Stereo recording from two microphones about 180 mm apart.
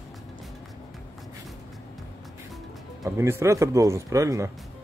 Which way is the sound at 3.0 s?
15° right (ahead or behind).